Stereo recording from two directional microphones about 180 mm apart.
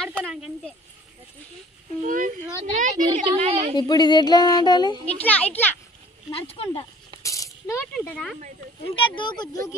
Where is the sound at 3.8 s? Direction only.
25° left (ahead or behind).